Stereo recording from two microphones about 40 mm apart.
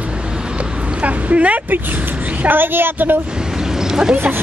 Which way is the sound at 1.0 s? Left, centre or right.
Right.